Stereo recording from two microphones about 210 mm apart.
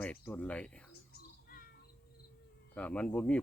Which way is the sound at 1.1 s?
45° left (ahead or behind).